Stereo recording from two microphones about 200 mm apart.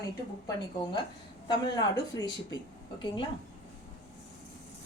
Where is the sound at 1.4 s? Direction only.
20° left (ahead or behind).